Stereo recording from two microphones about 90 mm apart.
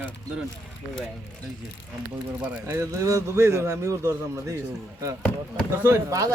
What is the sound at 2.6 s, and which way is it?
A man's voice, 30° right (ahead or behind).